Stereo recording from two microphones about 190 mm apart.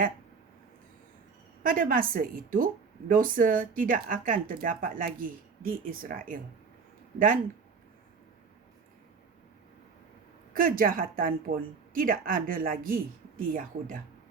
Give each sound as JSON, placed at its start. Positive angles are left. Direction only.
{"t": 1.6, "sound": "speech", "side_deg": -50}
{"t": 10.5, "sound": "speech", "side_deg": -50}